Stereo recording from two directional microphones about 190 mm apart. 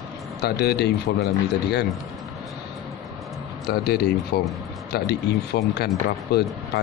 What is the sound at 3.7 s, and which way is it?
A man's voice, 55° left (ahead or behind).